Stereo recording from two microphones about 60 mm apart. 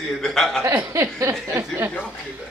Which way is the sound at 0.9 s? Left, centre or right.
Right.